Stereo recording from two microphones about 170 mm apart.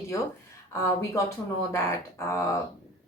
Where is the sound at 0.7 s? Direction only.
20° left (ahead or behind).